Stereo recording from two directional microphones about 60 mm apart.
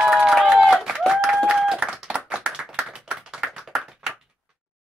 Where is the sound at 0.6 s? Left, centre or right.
Centre.